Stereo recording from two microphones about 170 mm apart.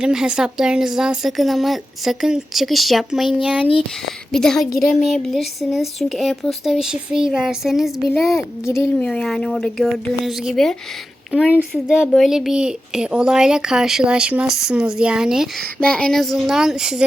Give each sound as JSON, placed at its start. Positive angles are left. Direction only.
{"t": 0.0, "sound": "speech", "side_deg": -5}
{"t": 8.4, "sound": "speech", "side_deg": 15}
{"t": 9.0, "sound": "speech", "side_deg": 5}